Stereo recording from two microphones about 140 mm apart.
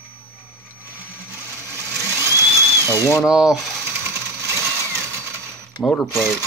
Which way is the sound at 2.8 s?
20° left (ahead or behind).